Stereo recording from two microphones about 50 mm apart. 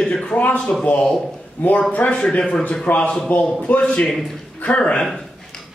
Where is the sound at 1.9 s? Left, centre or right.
Left.